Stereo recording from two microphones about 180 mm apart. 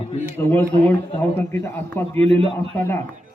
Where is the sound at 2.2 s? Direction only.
35° right (ahead or behind).